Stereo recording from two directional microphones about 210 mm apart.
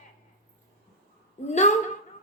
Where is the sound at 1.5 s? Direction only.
35° left (ahead or behind).